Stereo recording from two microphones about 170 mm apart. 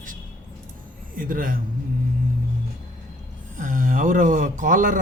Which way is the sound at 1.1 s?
55° right (ahead or behind).